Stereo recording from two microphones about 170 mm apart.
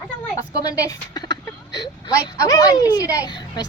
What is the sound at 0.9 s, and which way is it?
Speech, 25° left (ahead or behind).